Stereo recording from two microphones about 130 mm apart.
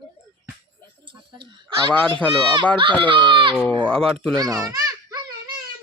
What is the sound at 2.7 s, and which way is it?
Speech, 40° right (ahead or behind).